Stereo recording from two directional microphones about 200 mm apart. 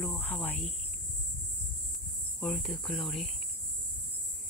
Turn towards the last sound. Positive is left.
turn(degrees=0)  # may be behind; listen again after turning